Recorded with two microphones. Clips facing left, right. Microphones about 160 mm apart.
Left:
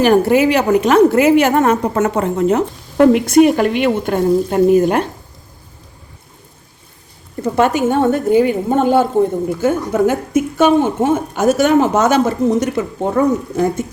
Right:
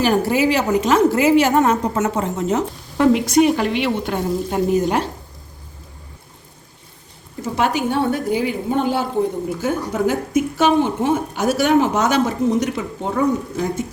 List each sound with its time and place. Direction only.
0.0 s a woman's voice: 60° left (ahead or behind)
7.4 s speech: 50° left (ahead or behind)